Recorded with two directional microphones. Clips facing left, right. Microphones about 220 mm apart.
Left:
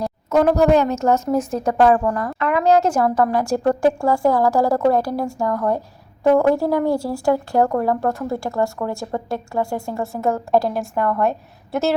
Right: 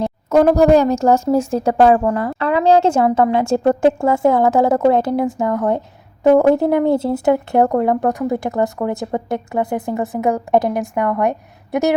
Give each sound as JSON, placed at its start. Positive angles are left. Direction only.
{"t": 0.3, "sound": "a woman's voice", "side_deg": -35}